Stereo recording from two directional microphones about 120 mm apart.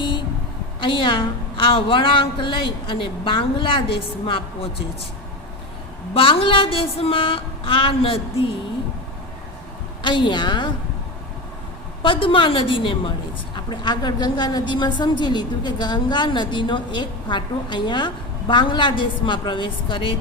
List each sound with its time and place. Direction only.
0.8 s a woman's voice: 45° left (ahead or behind)
6.1 s a woman's voice: 45° left (ahead or behind)
10.0 s a woman's voice: 40° left (ahead or behind)
12.0 s a woman's voice: 45° left (ahead or behind)